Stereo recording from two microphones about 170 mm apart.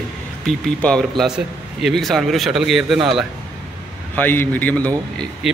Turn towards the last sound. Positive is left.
turn(degrees=5)  # may be behind; listen again after turning